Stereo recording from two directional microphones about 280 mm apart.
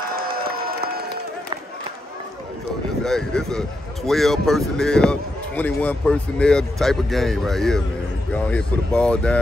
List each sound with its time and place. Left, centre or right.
0.1 s applause: right
3.0 s speech: centre